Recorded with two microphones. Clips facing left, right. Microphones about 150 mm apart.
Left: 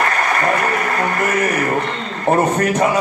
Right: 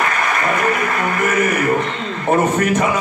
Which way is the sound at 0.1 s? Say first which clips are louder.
Left 1 dB; 35° left (ahead or behind).